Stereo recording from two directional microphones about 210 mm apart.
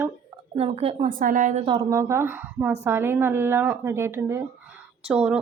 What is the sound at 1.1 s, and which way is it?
Speech, 40° right (ahead or behind).